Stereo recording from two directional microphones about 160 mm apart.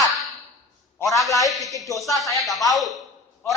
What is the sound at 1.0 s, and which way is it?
Speech, centre (ahead or behind).